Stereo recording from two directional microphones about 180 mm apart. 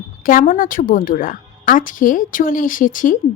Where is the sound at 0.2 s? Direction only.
50° left (ahead or behind).